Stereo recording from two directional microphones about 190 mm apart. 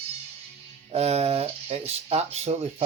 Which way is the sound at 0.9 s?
35° right (ahead or behind).